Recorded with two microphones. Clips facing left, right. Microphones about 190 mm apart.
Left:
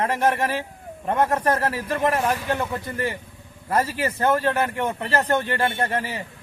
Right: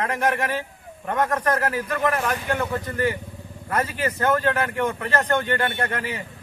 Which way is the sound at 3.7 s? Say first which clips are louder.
Left 2 dB; 30° left (ahead or behind).